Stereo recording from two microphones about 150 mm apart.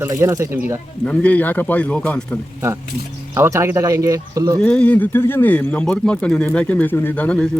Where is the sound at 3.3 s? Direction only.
20° right (ahead or behind).